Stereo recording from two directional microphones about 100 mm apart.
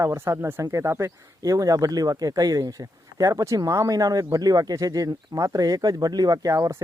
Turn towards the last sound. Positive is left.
turn(degrees=-35)  # may be behind; listen again after turning